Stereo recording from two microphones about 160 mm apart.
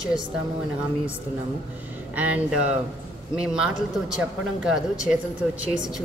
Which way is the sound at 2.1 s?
10° right (ahead or behind).